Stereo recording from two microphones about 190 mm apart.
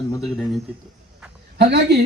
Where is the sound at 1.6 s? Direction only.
65° right (ahead or behind).